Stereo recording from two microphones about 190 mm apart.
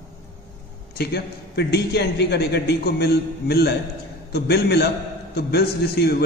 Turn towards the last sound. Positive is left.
turn(degrees=60)  # may be behind; listen again after turning